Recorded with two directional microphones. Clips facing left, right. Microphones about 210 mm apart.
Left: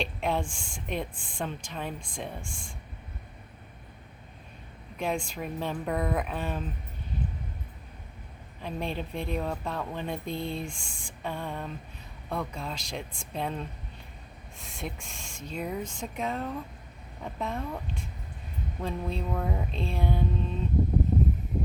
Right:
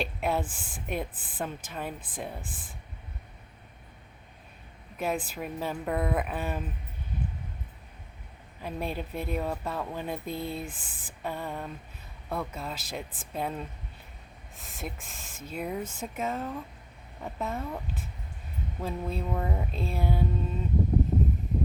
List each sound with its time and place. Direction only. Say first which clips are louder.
0.0 s speech: even; 5° right (ahead or behind)
4.9 s speech: even; 5° right (ahead or behind)
8.6 s speech: even; 5° right (ahead or behind)